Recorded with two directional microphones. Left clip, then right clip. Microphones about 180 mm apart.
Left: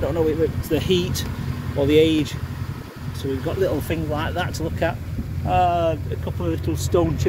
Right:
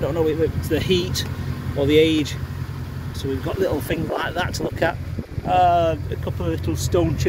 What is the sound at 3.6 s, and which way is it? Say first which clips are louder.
Speech: right 2 dB; 5° right (ahead or behind).